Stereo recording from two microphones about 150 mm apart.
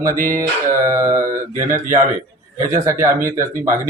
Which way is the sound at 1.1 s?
20° right (ahead or behind).